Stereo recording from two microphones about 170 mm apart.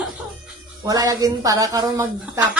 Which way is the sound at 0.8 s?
20° right (ahead or behind).